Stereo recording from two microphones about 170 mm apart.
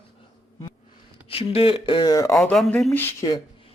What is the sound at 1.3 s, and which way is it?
Speech, 35° left (ahead or behind).